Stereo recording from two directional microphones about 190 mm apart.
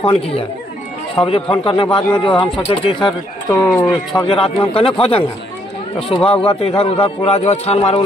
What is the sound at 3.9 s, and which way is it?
A man's voice, 25° left (ahead or behind).